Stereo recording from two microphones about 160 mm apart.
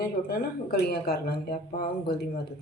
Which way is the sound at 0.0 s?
75° left (ahead or behind).